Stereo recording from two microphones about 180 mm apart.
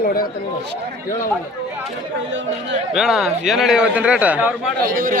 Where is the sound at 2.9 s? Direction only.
Centre (ahead or behind).